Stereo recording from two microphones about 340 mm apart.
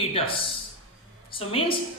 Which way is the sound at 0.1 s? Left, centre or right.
Centre.